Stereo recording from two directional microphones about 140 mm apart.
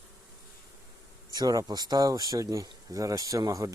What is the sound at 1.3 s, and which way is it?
Speech, 25° right (ahead or behind).